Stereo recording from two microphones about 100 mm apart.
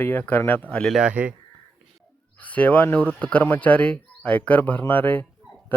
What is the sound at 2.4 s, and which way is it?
A man's voice, 15° left (ahead or behind).